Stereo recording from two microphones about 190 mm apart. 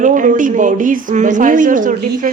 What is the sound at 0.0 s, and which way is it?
A woman's voice, 45° right (ahead or behind).